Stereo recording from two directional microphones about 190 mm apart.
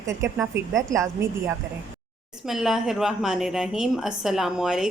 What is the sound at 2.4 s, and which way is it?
A woman's voice, centre (ahead or behind).